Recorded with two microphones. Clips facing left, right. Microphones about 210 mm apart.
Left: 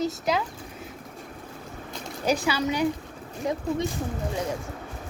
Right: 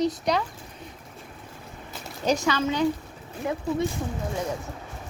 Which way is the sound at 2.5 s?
10° left (ahead or behind).